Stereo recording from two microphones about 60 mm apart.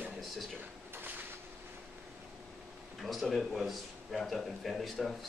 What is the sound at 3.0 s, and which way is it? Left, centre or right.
A man's voice, centre.